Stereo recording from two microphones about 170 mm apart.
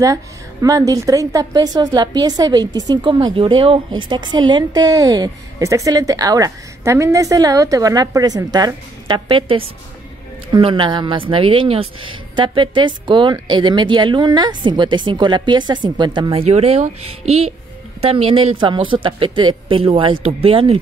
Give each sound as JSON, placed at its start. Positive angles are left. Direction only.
{"t": 0.0, "sound": "a woman's voice", "side_deg": -20}